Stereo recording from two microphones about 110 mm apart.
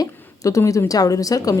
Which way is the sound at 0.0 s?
30° left (ahead or behind).